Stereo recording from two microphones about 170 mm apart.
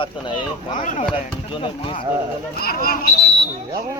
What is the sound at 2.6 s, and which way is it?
Speech, 60° left (ahead or behind).